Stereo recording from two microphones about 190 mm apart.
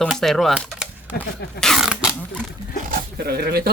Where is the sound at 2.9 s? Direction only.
55° right (ahead or behind).